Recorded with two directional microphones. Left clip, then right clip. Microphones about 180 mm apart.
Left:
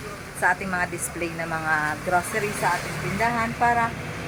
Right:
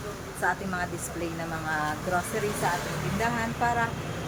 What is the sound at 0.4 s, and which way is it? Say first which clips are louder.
Speech: left 6 dB; 30° left (ahead or behind).